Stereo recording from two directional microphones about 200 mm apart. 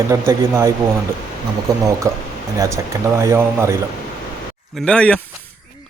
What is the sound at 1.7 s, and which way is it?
Speech, 20° right (ahead or behind).